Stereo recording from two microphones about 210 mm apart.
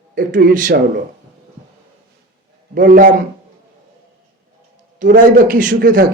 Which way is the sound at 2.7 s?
40° right (ahead or behind).